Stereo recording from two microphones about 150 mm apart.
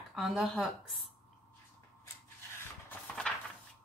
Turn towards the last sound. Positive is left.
turn(degrees=10)  # may be behind; listen again after turning